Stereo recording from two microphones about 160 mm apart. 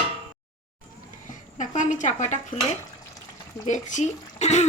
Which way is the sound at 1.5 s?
50° left (ahead or behind).